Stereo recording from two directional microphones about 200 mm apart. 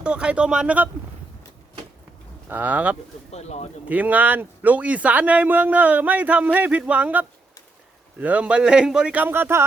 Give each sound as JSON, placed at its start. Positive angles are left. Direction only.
{"t": 0.0, "sound": "speech", "side_deg": -5}
{"t": 2.5, "sound": "a man's voice", "side_deg": -10}
{"t": 3.3, "sound": "speech", "side_deg": 35}
{"t": 3.8, "sound": "a man's voice", "side_deg": -10}